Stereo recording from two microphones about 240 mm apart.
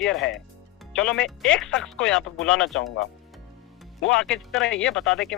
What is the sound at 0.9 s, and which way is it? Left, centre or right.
Speech, centre.